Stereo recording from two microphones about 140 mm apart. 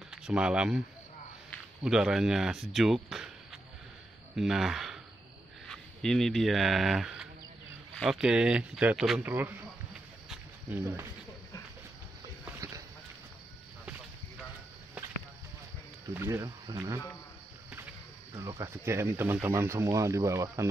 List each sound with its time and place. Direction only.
0.1 s speech: 5° right (ahead or behind)
4.4 s speech: centre (ahead or behind)
9.2 s speech: 15° right (ahead or behind)
12.5 s a sound: 25° right (ahead or behind)
16.1 s speech: 20° right (ahead or behind)
18.3 s speech: 25° right (ahead or behind)